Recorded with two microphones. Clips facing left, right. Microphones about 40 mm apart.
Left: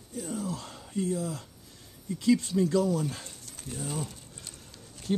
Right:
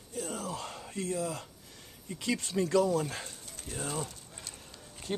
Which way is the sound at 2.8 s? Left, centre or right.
Centre.